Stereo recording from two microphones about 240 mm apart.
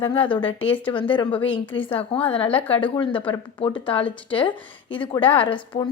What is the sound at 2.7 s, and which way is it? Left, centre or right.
A woman's voice, left.